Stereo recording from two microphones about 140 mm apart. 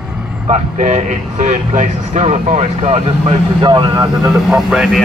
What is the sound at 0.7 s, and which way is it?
Speech, 55° right (ahead or behind).